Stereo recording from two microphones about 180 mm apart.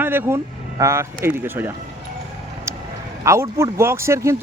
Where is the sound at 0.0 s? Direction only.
10° right (ahead or behind).